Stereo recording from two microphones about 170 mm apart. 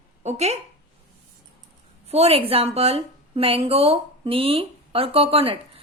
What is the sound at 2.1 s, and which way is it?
A woman's voice, 35° right (ahead or behind).